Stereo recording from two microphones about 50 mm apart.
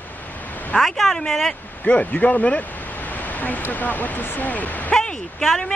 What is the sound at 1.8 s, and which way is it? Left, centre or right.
Speech, left.